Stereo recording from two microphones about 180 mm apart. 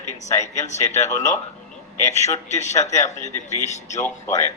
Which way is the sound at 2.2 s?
40° left (ahead or behind).